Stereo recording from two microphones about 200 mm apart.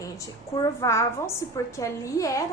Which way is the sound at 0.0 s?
15° left (ahead or behind).